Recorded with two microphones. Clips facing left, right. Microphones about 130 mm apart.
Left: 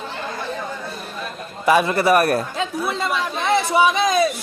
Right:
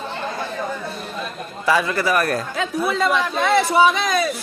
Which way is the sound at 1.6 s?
25° left (ahead or behind).